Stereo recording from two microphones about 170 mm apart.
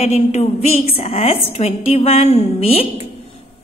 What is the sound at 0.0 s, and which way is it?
A woman's voice, 40° left (ahead or behind).